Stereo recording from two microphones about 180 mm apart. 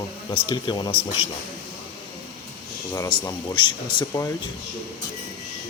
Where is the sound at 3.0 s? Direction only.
25° left (ahead or behind).